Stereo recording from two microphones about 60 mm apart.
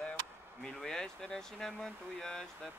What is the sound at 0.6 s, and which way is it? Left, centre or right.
Speech, centre.